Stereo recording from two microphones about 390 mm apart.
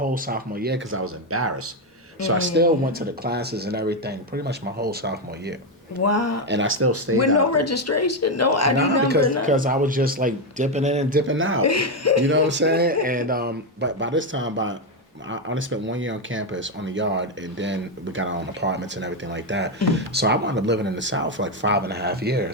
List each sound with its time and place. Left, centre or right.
0.0 s speech: right
6.0 s a man's voice: left
6.5 s speech: right
7.2 s a man's voice: left
9.0 s speech: right
11.3 s speech: right
11.6 s a man's voice: left
12.3 s speech: right